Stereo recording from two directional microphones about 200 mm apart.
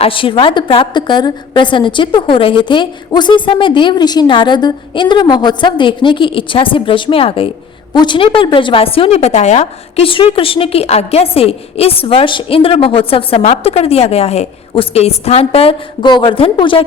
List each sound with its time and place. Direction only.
0.0 s a woman's voice: 25° left (ahead or behind)